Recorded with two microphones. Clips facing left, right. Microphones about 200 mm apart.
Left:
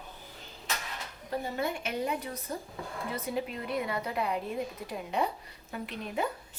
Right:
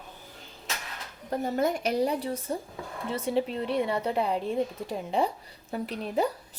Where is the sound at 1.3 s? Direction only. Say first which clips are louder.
Right 6 dB; 45° right (ahead or behind).